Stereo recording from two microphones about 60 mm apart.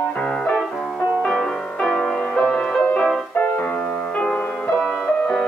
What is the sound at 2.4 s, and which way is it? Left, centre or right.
Music, centre.